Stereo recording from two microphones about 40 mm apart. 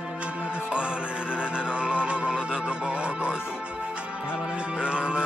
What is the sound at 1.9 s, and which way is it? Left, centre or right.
Music, right.